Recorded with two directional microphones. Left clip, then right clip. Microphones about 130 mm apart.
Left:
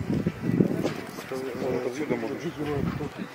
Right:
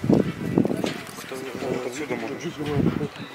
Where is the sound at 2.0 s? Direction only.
40° right (ahead or behind).